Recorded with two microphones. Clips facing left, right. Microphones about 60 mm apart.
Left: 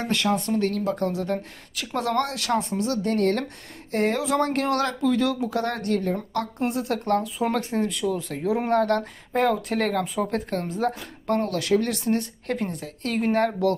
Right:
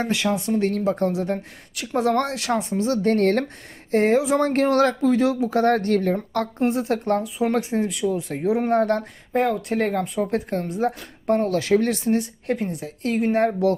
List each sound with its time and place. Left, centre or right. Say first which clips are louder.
0.1 s speech: right 1 dB; centre
0.6 s speech: right 3 dB; right
1.7 s speech: right 3 dB; centre
2.0 s speech: right 4 dB; right
3.1 s speech: right 4 dB; right
3.9 s speech: right 4 dB; right
6.6 s speech: right 5 dB; right
7.0 s speech: right 1 dB; centre
8.1 s speech: right 3 dB; right
9.0 s speech: right 1 dB; centre
11.5 s speech: right 3 dB; right; by 12.8 s centre
12.8 s speech: right 4 dB; centre